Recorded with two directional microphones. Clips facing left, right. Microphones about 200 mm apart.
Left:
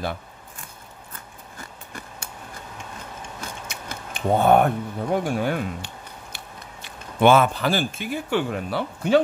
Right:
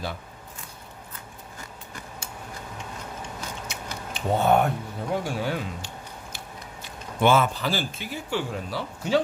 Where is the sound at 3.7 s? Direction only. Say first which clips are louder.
Even; 55° left (ahead or behind).